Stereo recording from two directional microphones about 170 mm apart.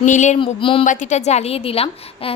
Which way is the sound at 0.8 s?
45° left (ahead or behind).